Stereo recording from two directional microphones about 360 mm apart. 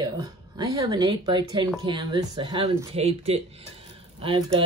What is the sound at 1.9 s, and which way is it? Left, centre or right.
Mantra, centre.